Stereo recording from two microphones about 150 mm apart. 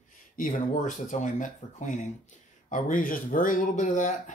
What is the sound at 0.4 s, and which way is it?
Speech, 60° left (ahead or behind).